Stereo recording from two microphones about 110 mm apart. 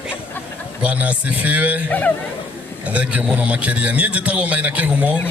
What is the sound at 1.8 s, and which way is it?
Speech, 15° left (ahead or behind).